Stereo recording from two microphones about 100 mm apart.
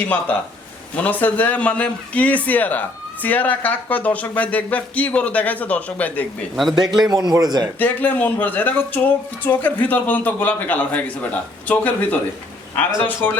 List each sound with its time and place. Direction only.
0.0 s a man's voice: 15° left (ahead or behind)
6.6 s a man's voice: centre (ahead or behind)
7.1 s a man's voice: 40° right (ahead or behind)
7.8 s a man's voice: 20° left (ahead or behind)